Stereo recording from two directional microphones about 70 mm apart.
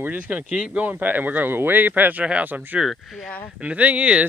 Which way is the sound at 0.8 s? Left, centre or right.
Right.